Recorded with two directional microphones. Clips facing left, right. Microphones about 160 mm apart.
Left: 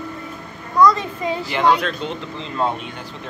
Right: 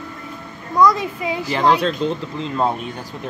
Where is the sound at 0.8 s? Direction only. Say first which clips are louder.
Even; 10° right (ahead or behind).